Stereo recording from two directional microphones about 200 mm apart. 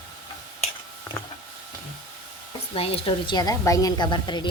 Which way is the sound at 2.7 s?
30° left (ahead or behind).